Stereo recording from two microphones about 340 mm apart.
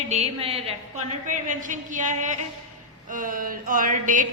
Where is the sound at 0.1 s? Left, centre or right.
Centre.